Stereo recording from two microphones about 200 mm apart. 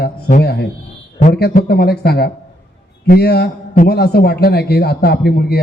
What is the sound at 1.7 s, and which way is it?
A man's voice, 55° left (ahead or behind).